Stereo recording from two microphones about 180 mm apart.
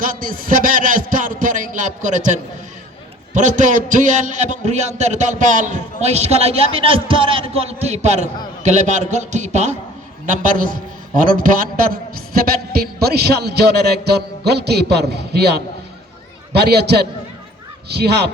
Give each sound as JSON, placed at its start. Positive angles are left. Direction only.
{"t": 0.0, "sound": "a man's voice", "side_deg": -50}